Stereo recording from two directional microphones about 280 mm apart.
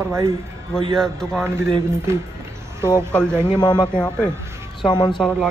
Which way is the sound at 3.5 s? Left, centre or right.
Centre.